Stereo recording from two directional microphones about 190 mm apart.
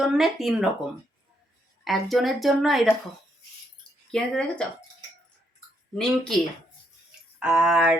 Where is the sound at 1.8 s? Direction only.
Centre (ahead or behind).